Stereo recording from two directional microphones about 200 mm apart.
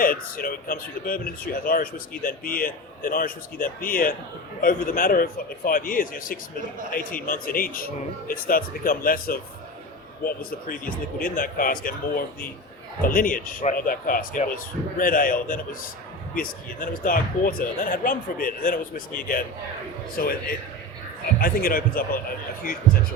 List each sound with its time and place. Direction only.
0.0 s speech: 45° left (ahead or behind)